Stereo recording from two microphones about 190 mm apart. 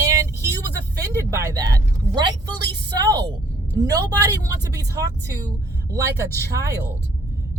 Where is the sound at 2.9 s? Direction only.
20° right (ahead or behind).